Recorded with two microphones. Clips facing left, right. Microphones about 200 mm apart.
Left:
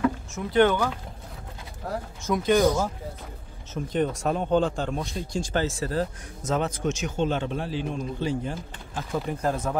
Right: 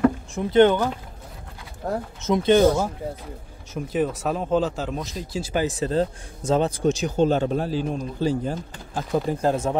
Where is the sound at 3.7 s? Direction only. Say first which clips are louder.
Right 2 dB; 5° right (ahead or behind).